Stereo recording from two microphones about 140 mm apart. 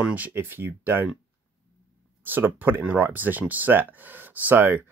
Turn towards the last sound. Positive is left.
turn(degrees=-15)  # may be behind; listen again after turning